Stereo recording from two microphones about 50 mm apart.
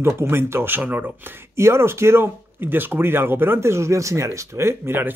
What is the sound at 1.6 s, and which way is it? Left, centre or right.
Speech, right.